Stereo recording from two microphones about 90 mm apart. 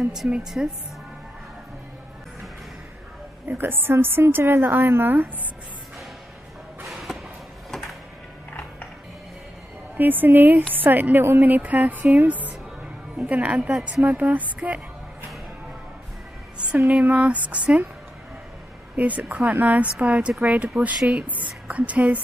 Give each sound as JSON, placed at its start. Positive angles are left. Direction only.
{"t": 0.1, "sound": "speech", "side_deg": -5}
{"t": 3.4, "sound": "speech", "side_deg": -25}
{"t": 6.9, "sound": "a sound", "side_deg": 0}
{"t": 9.9, "sound": "speech", "side_deg": -20}
{"t": 16.5, "sound": "speech", "side_deg": -15}
{"t": 18.9, "sound": "speech", "side_deg": -15}